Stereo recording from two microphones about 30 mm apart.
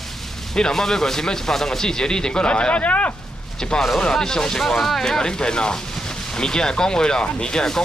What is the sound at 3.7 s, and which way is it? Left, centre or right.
A man's voice, left.